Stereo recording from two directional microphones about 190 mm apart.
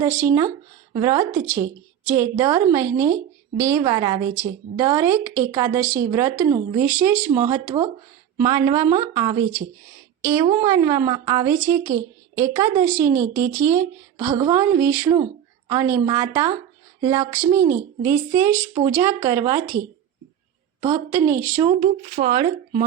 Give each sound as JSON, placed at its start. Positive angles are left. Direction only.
{"t": 0.0, "sound": "a woman's voice", "side_deg": -10}
{"t": 8.4, "sound": "a woman's voice", "side_deg": -20}
{"t": 20.9, "sound": "a woman's voice", "side_deg": -15}
{"t": 21.6, "sound": "speech", "side_deg": -40}